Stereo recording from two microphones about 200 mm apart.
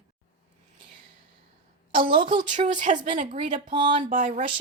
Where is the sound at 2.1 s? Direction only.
25° right (ahead or behind).